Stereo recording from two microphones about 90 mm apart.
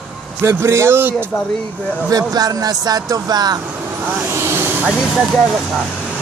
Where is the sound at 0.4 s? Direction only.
30° right (ahead or behind).